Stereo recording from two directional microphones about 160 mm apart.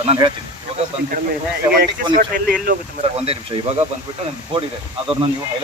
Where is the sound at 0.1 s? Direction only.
30° right (ahead or behind).